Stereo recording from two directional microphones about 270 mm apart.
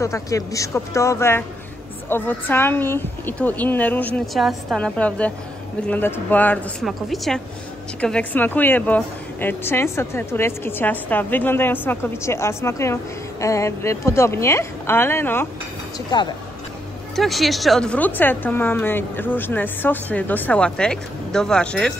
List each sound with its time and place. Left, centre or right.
0.0 s a woman's voice: centre
17.1 s a woman's voice: centre